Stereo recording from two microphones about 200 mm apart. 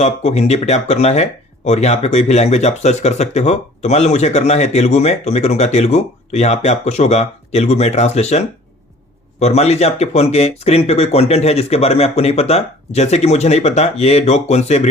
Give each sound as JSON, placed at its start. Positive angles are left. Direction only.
{"t": 0.0, "sound": "speech", "side_deg": 35}